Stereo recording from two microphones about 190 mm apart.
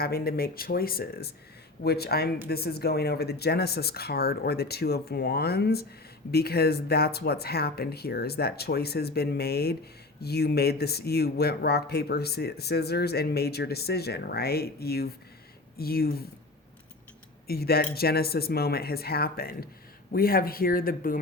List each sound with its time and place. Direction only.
0.0 s speech: 55° left (ahead or behind)
17.4 s speech: 55° left (ahead or behind)